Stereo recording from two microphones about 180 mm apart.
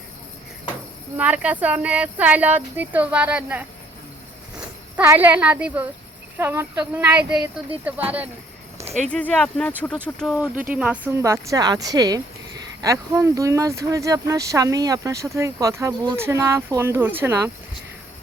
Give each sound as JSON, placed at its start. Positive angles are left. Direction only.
{"t": 1.1, "sound": "speech", "side_deg": -10}
{"t": 4.9, "sound": "speech", "side_deg": -10}
{"t": 8.9, "sound": "speech", "side_deg": 5}
{"t": 10.2, "sound": "speech", "side_deg": -5}